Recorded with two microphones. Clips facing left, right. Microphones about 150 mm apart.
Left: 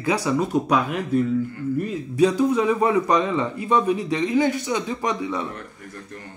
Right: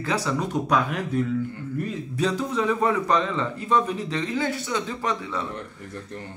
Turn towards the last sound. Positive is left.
turn(degrees=-30)  # may be behind; listen again after turning